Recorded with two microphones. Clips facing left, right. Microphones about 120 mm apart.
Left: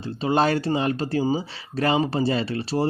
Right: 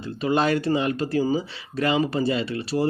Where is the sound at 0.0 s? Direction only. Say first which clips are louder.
Left 1 dB; 30° left (ahead or behind).